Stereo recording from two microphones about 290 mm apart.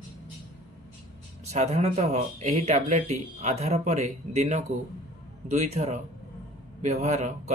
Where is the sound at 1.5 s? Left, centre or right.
Right.